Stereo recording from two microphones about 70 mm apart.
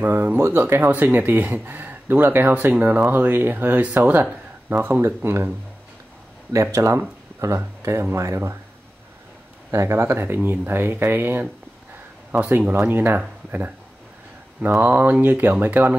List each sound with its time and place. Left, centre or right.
0.0 s speech: right
6.5 s speech: right
9.7 s speech: right
14.6 s speech: right